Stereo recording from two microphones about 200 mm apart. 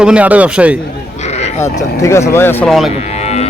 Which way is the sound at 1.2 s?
35° left (ahead or behind).